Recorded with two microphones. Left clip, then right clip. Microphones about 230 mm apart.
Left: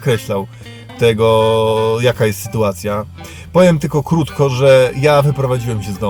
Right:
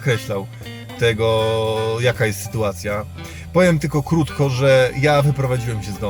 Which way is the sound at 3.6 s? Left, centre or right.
Centre.